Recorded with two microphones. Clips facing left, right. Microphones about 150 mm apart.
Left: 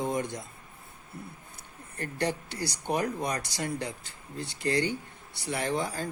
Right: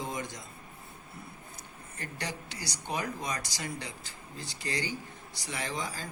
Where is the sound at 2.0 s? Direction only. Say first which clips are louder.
Left 8 dB; 55° left (ahead or behind).